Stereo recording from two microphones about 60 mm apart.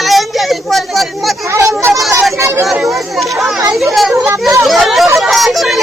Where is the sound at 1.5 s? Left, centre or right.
Right.